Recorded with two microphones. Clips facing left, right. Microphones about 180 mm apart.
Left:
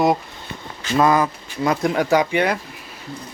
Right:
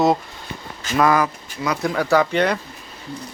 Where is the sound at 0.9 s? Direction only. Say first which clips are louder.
Left 1 dB; 25° left (ahead or behind).